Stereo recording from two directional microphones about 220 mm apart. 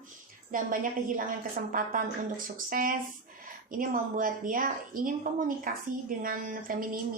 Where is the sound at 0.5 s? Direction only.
40° right (ahead or behind).